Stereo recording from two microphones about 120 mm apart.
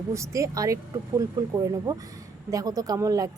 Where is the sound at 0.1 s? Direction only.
25° right (ahead or behind).